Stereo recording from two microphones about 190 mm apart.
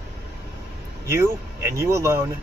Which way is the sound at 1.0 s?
15° right (ahead or behind).